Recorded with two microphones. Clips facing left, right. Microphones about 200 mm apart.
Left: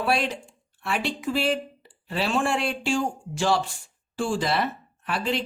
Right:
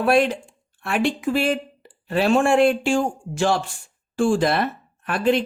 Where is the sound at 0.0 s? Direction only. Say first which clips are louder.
Right 7 dB; 50° right (ahead or behind).